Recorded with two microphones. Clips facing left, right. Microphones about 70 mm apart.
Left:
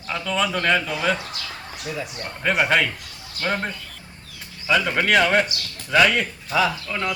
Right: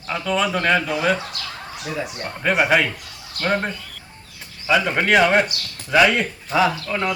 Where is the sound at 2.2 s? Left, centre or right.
Centre.